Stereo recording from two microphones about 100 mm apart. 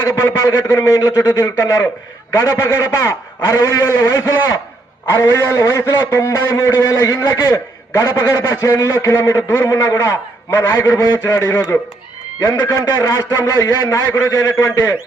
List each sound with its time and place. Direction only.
0.0 s a man's voice: 25° left (ahead or behind)